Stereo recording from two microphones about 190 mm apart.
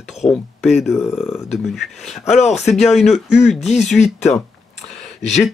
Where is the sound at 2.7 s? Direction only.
Centre (ahead or behind).